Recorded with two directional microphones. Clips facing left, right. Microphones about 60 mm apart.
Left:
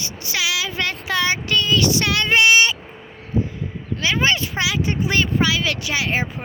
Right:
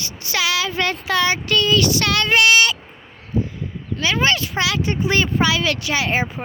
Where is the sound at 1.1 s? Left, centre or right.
Centre.